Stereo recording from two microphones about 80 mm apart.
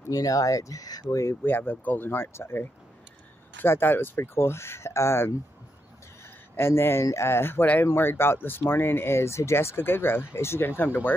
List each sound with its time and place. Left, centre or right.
0.1 s speech: left
1.2 s speech: left
6.5 s speech: left